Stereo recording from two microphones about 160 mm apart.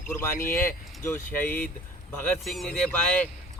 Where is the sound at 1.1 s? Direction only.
10° left (ahead or behind).